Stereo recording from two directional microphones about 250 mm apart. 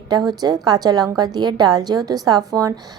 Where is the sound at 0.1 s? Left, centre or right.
Centre.